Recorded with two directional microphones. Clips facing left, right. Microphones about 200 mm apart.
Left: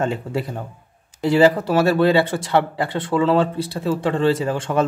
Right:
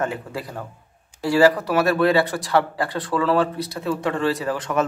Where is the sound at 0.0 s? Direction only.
25° left (ahead or behind).